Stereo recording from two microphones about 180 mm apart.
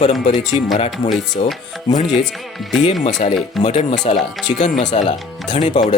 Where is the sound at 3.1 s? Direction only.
40° left (ahead or behind).